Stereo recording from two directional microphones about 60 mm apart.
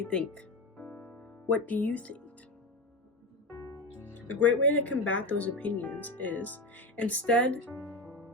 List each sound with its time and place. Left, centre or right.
0.0 s music: centre
0.9 s music: left
3.9 s speech: left